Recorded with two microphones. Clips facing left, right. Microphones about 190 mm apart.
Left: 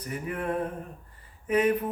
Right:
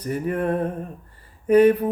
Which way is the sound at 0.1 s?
40° right (ahead or behind).